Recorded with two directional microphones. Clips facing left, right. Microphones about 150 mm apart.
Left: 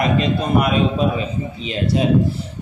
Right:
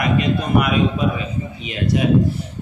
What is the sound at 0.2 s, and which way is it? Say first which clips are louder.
Speech: even; 30° left (ahead or behind).